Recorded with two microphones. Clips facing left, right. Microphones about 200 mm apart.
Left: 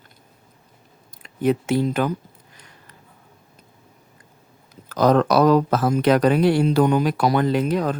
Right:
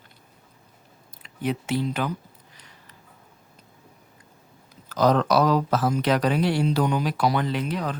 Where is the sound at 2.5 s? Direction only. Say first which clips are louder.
Left 3 dB; 50° left (ahead or behind).